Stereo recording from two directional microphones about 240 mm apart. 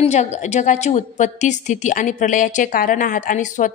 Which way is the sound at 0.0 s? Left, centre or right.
Left.